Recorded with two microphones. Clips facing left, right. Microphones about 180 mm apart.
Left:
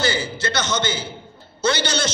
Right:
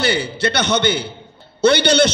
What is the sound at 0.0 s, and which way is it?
A man's voice, 65° right (ahead or behind).